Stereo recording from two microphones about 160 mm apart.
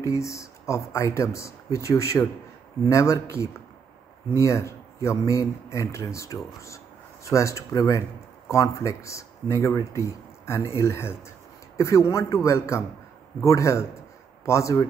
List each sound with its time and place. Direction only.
0.0 s speech: 20° left (ahead or behind)